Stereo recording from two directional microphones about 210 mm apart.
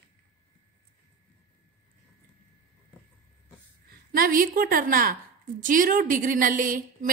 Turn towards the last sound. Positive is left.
turn(degrees=-40)  # may be behind; listen again after turning